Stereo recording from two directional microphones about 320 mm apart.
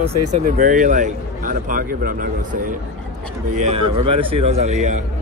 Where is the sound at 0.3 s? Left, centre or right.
Right.